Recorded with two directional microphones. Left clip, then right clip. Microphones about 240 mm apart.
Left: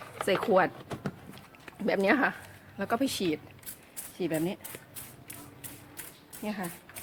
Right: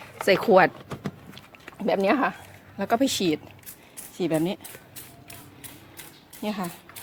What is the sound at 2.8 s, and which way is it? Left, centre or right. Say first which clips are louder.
Speech: right 6 dB; right.